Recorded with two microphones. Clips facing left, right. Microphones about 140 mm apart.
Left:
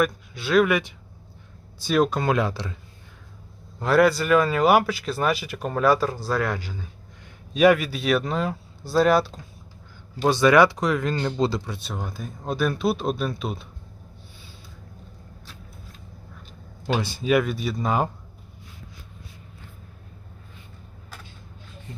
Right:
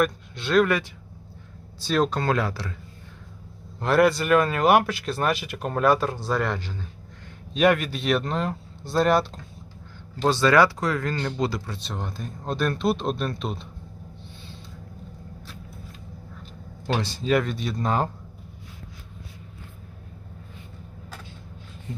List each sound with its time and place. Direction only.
0.0 s speech: 5° left (ahead or behind)
3.8 s speech: centre (ahead or behind)
10.2 s speech: 15° left (ahead or behind)
11.6 s speech: 10° left (ahead or behind)
16.8 s speech: 10° left (ahead or behind)